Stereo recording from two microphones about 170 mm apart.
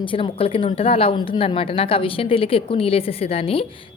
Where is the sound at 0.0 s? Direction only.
30° left (ahead or behind).